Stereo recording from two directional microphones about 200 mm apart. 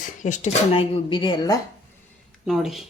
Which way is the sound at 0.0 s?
40° left (ahead or behind).